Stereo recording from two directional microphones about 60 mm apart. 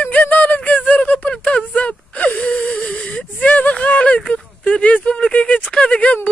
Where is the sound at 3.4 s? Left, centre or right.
Left.